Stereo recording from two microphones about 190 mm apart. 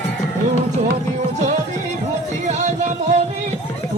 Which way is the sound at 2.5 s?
40° right (ahead or behind).